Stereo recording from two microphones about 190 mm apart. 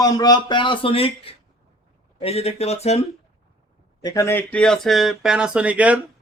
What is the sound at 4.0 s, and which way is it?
Speech, 20° left (ahead or behind).